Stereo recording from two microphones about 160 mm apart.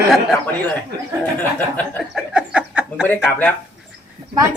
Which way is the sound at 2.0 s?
5° right (ahead or behind).